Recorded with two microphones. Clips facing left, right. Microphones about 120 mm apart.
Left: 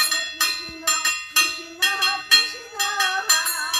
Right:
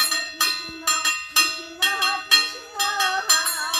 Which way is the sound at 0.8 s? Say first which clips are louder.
Right 1 dB; 5° right (ahead or behind).